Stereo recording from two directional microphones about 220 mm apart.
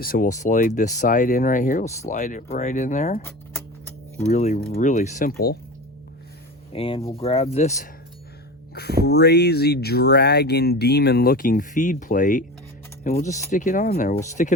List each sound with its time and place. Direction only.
0.0 s speech: 40° left (ahead or behind)
4.3 s speech: 30° left (ahead or behind)
4.6 s speech: 40° left (ahead or behind)
6.7 s speech: 25° left (ahead or behind)
8.7 s speech: 45° left (ahead or behind)